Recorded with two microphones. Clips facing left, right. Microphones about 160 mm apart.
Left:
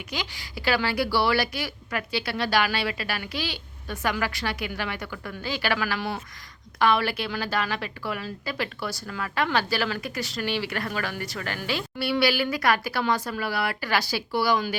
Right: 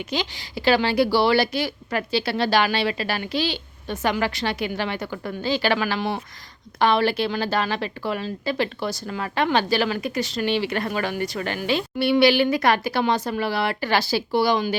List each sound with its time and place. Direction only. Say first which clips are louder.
0.1 s speech: right 5 dB; 25° right (ahead or behind)